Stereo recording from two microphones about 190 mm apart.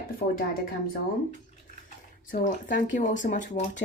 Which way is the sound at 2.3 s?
45° left (ahead or behind).